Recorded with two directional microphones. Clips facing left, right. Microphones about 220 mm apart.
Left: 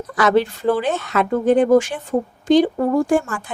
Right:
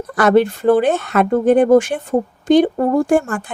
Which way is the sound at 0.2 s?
55° right (ahead or behind).